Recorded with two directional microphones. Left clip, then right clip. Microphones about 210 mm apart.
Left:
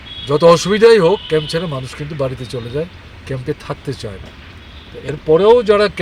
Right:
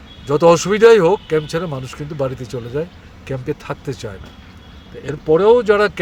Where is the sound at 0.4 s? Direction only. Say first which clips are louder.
Left 2 dB; 5° right (ahead or behind).